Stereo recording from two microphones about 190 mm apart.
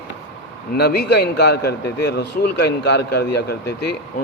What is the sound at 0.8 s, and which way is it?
A man's voice, 60° left (ahead or behind).